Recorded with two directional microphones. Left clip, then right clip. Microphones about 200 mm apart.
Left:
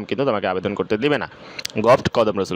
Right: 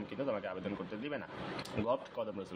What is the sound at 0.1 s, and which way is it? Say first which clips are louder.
Speech: left 18 dB; 50° left (ahead or behind).